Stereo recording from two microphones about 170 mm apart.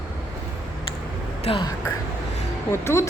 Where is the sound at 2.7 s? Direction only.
15° left (ahead or behind).